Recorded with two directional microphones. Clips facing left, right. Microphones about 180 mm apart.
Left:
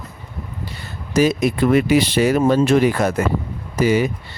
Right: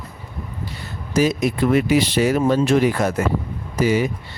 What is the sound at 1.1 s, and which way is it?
Speech, 65° left (ahead or behind).